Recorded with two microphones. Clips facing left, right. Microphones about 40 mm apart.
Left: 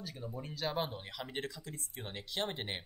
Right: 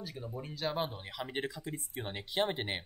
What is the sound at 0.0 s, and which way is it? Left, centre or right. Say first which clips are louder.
Speech: right 2 dB; centre.